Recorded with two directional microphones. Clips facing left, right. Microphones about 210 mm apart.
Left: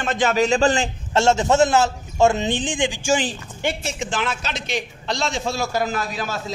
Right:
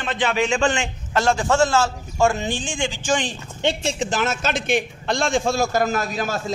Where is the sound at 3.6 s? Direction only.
30° right (ahead or behind).